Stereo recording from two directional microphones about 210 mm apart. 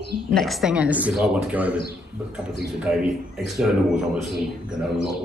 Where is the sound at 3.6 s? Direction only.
5° right (ahead or behind).